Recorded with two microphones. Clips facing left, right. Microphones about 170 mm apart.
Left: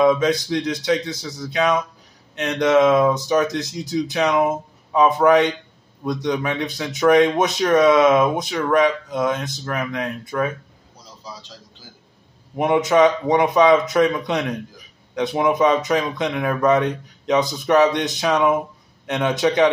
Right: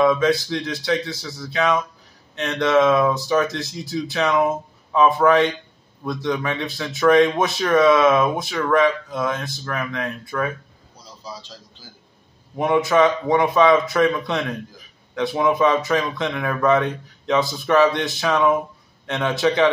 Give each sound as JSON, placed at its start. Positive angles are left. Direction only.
{"t": 0.0, "sound": "speech", "side_deg": 20}
{"t": 12.5, "sound": "a man's voice", "side_deg": 20}